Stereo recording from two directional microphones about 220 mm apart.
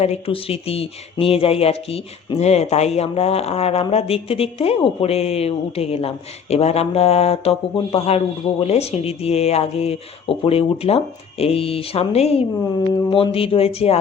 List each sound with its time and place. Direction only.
0.0 s speech: 25° left (ahead or behind)